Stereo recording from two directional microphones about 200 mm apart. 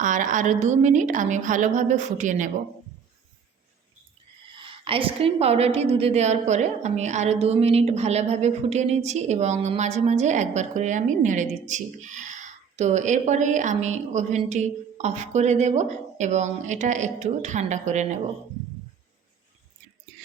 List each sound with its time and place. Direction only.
0.0 s a woman's voice: 40° right (ahead or behind)
4.6 s a woman's voice: 25° right (ahead or behind)